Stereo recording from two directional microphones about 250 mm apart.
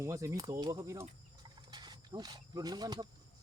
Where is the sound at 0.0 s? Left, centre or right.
Centre.